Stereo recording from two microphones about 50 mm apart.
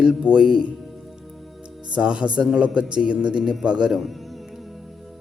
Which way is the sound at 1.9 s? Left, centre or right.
Centre.